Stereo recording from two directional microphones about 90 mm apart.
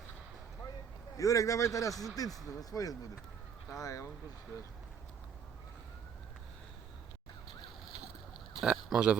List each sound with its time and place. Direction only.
1.1 s speech: 40° left (ahead or behind)
8.6 s speech: 5° right (ahead or behind)